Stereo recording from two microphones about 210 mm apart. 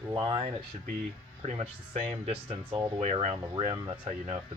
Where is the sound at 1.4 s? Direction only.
30° right (ahead or behind).